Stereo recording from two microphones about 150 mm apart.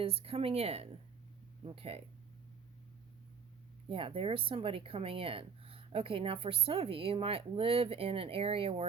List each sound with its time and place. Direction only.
0.0 s speech: 40° right (ahead or behind)
3.8 s speech: 35° right (ahead or behind)